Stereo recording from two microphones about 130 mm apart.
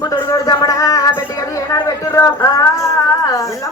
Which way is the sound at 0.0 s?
30° left (ahead or behind).